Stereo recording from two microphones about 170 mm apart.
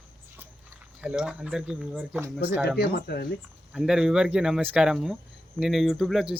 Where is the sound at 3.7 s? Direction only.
5° right (ahead or behind).